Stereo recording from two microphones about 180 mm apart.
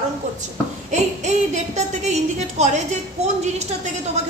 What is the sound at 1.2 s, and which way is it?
A woman's voice, 40° right (ahead or behind).